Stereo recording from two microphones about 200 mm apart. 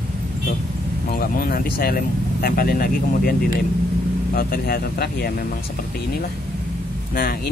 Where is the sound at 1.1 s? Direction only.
45° left (ahead or behind).